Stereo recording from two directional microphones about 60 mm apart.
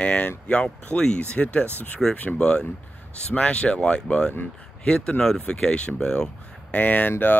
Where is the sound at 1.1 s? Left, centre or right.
Left.